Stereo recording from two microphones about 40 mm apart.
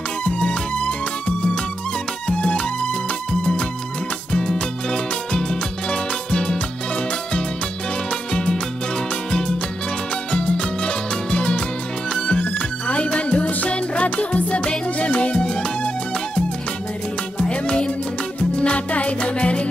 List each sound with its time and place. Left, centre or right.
0.2 s music: left
8.3 s music: left
17.4 s music: left